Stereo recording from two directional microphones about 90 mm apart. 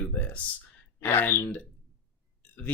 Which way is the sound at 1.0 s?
25° left (ahead or behind).